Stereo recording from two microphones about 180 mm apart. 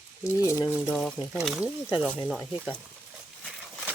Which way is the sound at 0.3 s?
20° left (ahead or behind).